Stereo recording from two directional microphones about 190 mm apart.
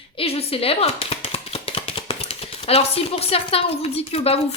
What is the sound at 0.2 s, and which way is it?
A woman's voice, 30° left (ahead or behind).